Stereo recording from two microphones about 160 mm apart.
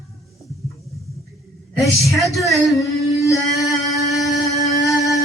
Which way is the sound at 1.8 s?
20° left (ahead or behind).